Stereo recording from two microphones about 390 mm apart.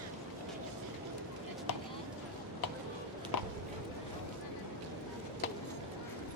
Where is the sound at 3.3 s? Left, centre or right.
Left.